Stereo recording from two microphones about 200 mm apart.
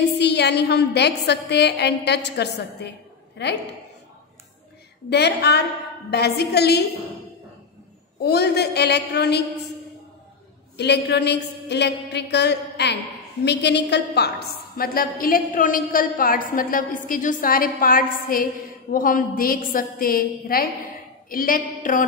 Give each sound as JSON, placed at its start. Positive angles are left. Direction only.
{"t": 0.2, "sound": "a woman's voice", "side_deg": 55}
{"t": 5.1, "sound": "a woman's voice", "side_deg": 55}
{"t": 8.2, "sound": "a woman's voice", "side_deg": 55}
{"t": 10.8, "sound": "a woman's voice", "side_deg": 55}